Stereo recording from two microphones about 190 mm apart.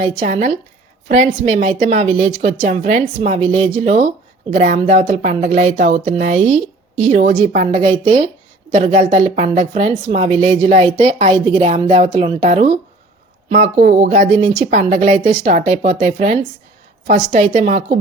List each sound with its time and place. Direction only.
0.0 s speech: 35° right (ahead or behind)
13.5 s speech: 40° right (ahead or behind)